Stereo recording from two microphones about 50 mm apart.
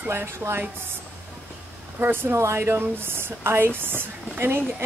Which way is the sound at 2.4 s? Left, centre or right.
Right.